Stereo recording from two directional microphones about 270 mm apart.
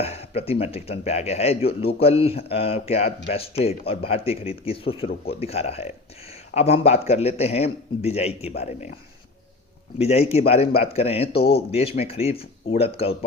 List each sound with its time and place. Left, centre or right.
0.0 s speech: left
10.0 s speech: left